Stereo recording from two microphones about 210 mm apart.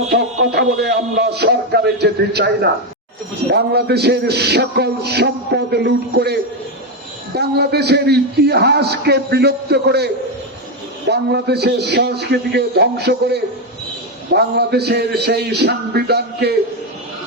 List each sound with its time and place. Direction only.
0.5 s a man's voice: 50° right (ahead or behind)
11.1 s a man's voice: 50° right (ahead or behind)